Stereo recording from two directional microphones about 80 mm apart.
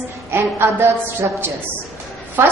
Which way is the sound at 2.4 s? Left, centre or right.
Right.